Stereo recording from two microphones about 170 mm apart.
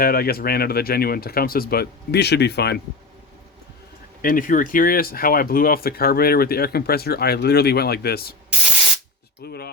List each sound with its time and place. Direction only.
0.0 s speech: 60° left (ahead or behind)
4.2 s speech: 55° left (ahead or behind)
9.4 s a sound: 70° left (ahead or behind)